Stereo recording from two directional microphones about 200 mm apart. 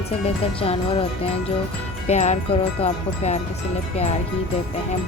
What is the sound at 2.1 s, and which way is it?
Music, 35° left (ahead or behind).